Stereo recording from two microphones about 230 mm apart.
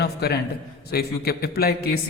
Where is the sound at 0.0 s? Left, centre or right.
Left.